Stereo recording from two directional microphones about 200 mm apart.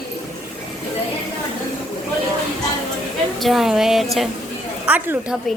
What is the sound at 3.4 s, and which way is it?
A woman's voice, centre (ahead or behind).